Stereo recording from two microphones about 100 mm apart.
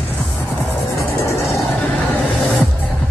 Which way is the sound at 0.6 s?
30° left (ahead or behind).